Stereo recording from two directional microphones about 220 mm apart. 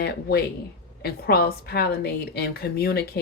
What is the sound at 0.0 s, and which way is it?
Speech, 45° left (ahead or behind).